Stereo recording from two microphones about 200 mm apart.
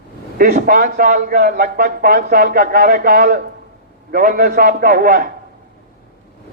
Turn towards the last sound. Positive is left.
turn(degrees=-50)  # may be behind; listen again after turning